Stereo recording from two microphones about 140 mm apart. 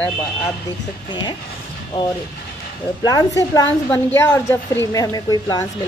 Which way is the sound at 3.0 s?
25° left (ahead or behind).